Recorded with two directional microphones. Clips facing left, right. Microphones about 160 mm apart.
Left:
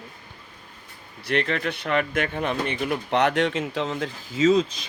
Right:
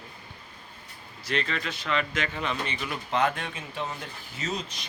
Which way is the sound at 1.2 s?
65° left (ahead or behind).